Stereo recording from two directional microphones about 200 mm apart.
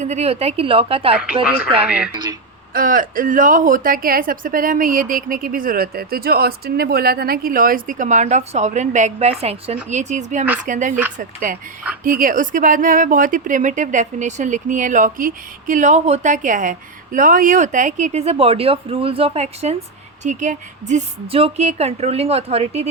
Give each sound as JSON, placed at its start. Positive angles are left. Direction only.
{"t": 0.0, "sound": "a woman's voice", "side_deg": -35}
{"t": 1.1, "sound": "speech", "side_deg": -5}
{"t": 2.7, "sound": "a woman's voice", "side_deg": -45}